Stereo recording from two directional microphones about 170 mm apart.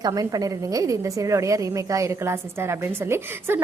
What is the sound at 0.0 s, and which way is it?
A woman's voice, 20° right (ahead or behind).